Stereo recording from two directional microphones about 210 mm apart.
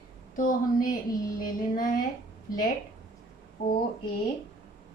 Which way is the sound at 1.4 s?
45° left (ahead or behind).